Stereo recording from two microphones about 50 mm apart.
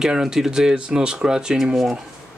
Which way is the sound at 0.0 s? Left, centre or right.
Centre.